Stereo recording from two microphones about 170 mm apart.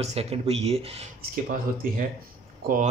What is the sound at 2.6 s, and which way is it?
Speech, 55° right (ahead or behind).